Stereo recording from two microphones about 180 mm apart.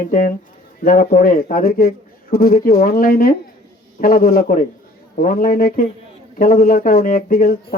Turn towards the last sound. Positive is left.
turn(degrees=55)  # may be behind; listen again after turning